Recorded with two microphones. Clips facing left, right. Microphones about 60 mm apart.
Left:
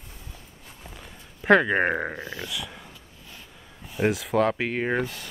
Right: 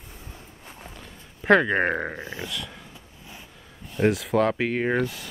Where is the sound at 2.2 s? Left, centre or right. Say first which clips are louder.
Even; right.